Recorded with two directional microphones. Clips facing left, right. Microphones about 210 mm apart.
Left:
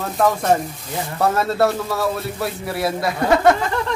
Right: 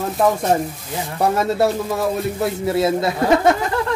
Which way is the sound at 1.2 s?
15° right (ahead or behind).